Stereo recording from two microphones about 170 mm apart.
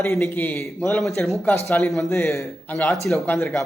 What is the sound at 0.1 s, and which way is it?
A man's voice, 15° left (ahead or behind).